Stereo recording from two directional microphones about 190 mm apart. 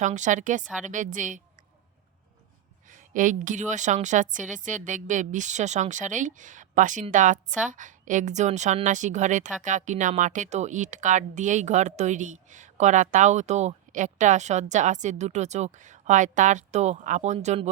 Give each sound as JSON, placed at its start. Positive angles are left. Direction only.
{"t": 0.0, "sound": "speech", "side_deg": -40}
{"t": 2.9, "sound": "speech", "side_deg": -45}